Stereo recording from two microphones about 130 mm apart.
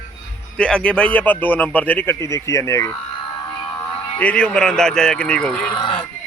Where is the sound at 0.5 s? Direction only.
5° left (ahead or behind); by 2.9 s 25° left (ahead or behind).